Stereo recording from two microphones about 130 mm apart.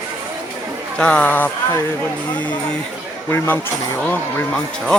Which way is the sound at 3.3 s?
15° left (ahead or behind).